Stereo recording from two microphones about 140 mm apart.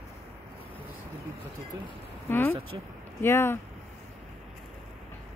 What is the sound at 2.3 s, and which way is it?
Speech, 15° left (ahead or behind).